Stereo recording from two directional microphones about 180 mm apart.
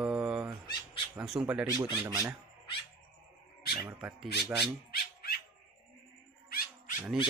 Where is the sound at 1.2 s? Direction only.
5° right (ahead or behind).